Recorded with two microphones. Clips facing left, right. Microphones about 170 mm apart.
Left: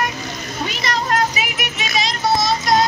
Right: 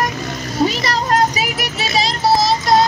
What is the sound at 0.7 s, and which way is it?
Music, 35° right (ahead or behind).